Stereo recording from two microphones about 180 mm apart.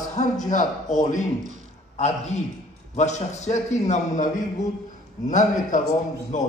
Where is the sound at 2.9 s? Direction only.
40° left (ahead or behind).